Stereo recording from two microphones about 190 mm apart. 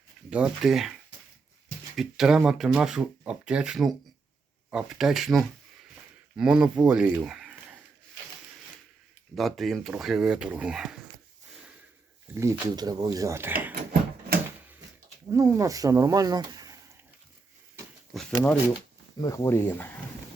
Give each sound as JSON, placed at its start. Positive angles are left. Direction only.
{"t": 0.3, "sound": "speech", "side_deg": -5}
{"t": 2.0, "sound": "speech", "side_deg": 0}
{"t": 7.3, "sound": "a sound", "side_deg": 0}
{"t": 9.3, "sound": "speech", "side_deg": 0}
{"t": 12.3, "sound": "speech", "side_deg": -15}
{"t": 15.3, "sound": "speech", "side_deg": -15}
{"t": 18.1, "sound": "speech", "side_deg": 0}
{"t": 19.2, "sound": "speech", "side_deg": 20}